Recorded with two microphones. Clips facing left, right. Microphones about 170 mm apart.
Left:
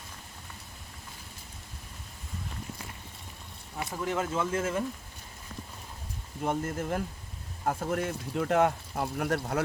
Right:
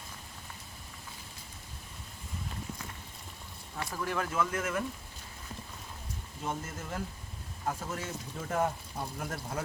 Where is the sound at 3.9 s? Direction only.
20° left (ahead or behind).